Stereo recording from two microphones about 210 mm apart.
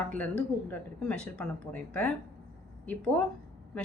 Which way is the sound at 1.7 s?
15° left (ahead or behind).